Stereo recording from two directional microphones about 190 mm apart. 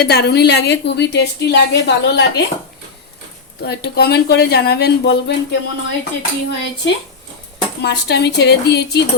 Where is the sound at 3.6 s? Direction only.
55° left (ahead or behind).